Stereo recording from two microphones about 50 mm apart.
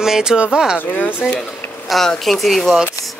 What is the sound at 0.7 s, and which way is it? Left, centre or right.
Speech, left.